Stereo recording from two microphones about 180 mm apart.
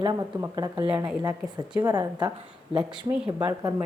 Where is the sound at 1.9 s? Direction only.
20° right (ahead or behind).